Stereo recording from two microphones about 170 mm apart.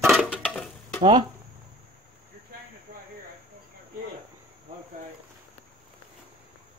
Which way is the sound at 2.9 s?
50° right (ahead or behind).